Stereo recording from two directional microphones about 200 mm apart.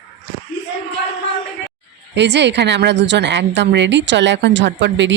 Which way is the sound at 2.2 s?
60° right (ahead or behind).